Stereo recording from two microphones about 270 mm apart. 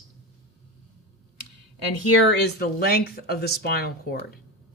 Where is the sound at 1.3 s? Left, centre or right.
Left.